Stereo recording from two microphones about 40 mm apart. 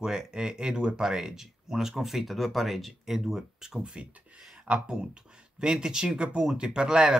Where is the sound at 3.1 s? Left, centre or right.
Centre.